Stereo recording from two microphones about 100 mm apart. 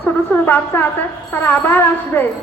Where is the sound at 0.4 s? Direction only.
20° left (ahead or behind).